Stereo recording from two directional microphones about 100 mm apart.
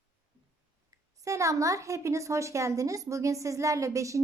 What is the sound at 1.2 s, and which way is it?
A woman's voice, 30° right (ahead or behind).